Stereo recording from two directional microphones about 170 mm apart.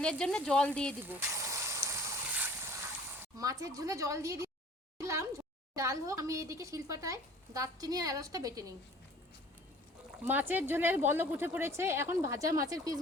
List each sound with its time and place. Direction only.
0.0 s speech: 5° left (ahead or behind)
1.0 s vehicle: 10° right (ahead or behind)
3.3 s a woman's voice: 20° right (ahead or behind)
10.2 s speech: 10° right (ahead or behind)